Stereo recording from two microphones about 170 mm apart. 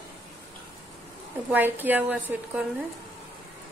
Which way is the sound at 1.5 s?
10° right (ahead or behind).